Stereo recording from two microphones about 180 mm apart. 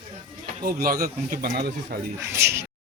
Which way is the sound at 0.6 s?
55° right (ahead or behind).